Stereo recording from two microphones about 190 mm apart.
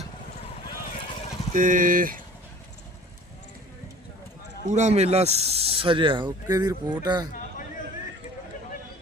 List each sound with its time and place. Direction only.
0.9 s vehicle: 35° left (ahead or behind)
1.5 s speech: 45° right (ahead or behind)
4.6 s speech: 40° right (ahead or behind); by 7.3 s 20° right (ahead or behind)